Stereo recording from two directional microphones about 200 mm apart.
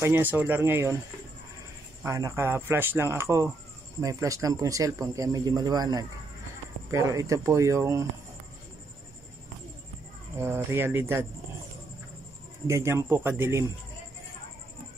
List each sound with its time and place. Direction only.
0.0 s speech: 10° right (ahead or behind)
2.0 s speech: 15° right (ahead or behind)
10.4 s speech: 10° right (ahead or behind)
12.6 s speech: 15° right (ahead or behind)